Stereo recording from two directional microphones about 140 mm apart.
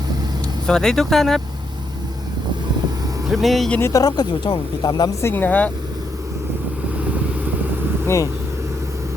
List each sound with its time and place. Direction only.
0.7 s speech: 5° left (ahead or behind)
3.2 s speech: centre (ahead or behind)
3.8 s speech: 20° left (ahead or behind)
5.2 s speech: 15° left (ahead or behind)
8.0 s speech: 20° left (ahead or behind)